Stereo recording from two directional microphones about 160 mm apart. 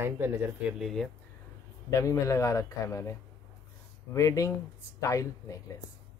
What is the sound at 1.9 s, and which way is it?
Speech, 20° left (ahead or behind).